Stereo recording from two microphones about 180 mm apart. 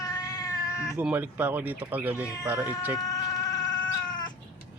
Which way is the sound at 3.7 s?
25° left (ahead or behind).